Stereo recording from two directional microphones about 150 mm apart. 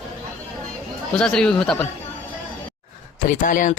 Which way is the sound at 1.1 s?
5° left (ahead or behind).